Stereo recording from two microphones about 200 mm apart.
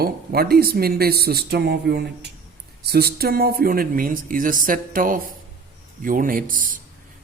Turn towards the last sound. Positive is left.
turn(degrees=-45)  # may be behind; listen again after turning